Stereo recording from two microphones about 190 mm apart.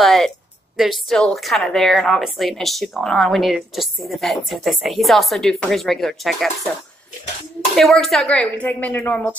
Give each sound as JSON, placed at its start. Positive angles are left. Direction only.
{"t": 0.0, "sound": "a sound", "side_deg": 0}
{"t": 0.7, "sound": "a woman's voice", "side_deg": 0}
{"t": 7.7, "sound": "speech", "side_deg": 0}